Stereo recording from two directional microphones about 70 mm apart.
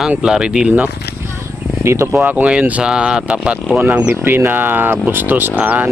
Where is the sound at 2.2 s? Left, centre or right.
Right.